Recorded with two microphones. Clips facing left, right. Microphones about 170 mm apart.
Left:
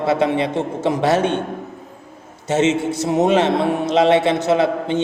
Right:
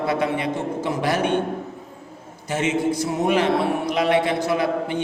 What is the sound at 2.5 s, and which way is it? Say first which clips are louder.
A man's voice: left 4 dB; 25° left (ahead or behind).